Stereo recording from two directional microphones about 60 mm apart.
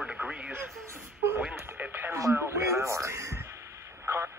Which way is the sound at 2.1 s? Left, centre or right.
Right.